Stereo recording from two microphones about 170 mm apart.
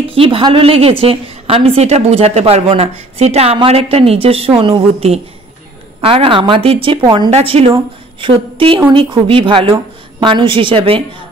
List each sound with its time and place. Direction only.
0.1 s a woman's voice: 30° right (ahead or behind)